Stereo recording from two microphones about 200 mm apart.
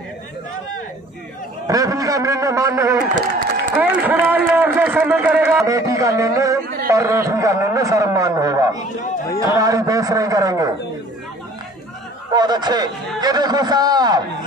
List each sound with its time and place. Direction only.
1.7 s a man's voice: 15° right (ahead or behind)
12.3 s a man's voice: 20° right (ahead or behind)